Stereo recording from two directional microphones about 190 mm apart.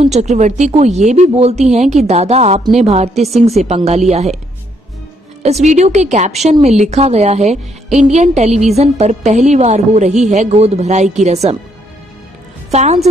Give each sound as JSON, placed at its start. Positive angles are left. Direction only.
{"t": 0.0, "sound": "speech", "side_deg": -35}
{"t": 5.4, "sound": "speech", "side_deg": -35}
{"t": 12.7, "sound": "speech", "side_deg": -35}